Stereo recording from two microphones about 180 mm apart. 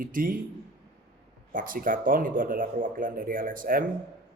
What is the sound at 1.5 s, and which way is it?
Speech, 50° right (ahead or behind).